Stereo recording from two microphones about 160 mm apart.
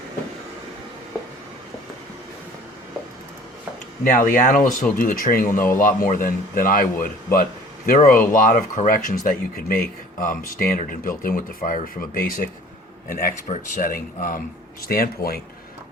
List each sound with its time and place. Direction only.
4.3 s speech: 55° left (ahead or behind)